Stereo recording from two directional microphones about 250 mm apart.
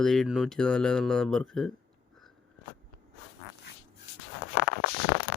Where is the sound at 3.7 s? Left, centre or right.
Left.